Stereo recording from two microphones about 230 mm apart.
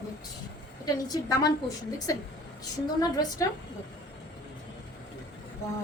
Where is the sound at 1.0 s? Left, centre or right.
Centre.